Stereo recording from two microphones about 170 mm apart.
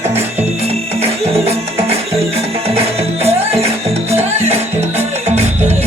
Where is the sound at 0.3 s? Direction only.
40° right (ahead or behind).